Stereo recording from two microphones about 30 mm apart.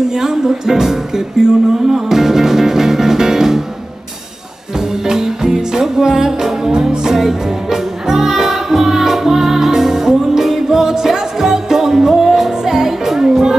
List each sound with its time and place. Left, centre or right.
0.1 s music: centre
4.7 s music: centre